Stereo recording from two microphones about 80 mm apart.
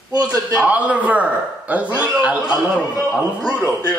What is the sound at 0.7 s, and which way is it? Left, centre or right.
A man's voice, centre.